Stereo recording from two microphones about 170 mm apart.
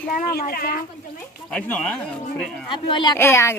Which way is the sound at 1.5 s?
5° left (ahead or behind).